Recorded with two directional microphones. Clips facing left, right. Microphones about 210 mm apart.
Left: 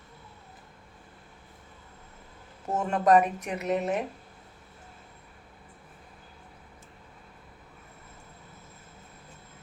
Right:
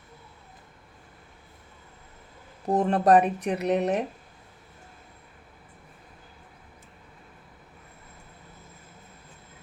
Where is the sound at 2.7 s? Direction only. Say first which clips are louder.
Right 3 dB; 35° right (ahead or behind).